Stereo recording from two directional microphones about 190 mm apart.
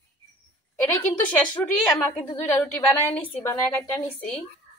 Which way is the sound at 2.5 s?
15° left (ahead or behind).